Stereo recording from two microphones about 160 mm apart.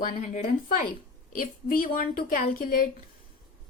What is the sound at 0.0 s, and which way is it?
A woman's voice, 55° left (ahead or behind).